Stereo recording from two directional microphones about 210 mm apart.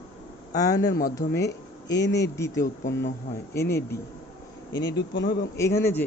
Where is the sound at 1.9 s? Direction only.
55° left (ahead or behind).